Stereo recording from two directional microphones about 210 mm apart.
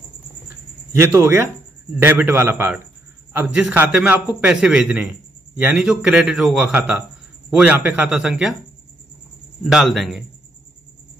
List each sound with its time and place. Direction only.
0.9 s a man's voice: 10° right (ahead or behind)
9.6 s a man's voice: centre (ahead or behind)